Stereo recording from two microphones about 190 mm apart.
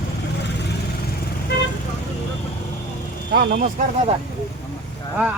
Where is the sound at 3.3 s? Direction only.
60° right (ahead or behind).